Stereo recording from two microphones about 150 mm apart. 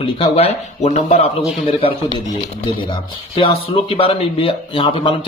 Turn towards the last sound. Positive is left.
turn(degrees=35)  # may be behind; listen again after turning